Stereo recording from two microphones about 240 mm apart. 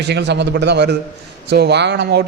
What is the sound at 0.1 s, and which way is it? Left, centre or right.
A man's voice, right.